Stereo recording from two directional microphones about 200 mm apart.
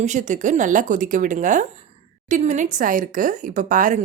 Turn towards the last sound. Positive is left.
turn(degrees=-40)  # may be behind; listen again after turning